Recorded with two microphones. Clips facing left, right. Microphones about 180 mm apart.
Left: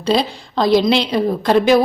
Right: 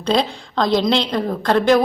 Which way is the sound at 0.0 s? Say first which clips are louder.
Left 1 dB; 5° left (ahead or behind).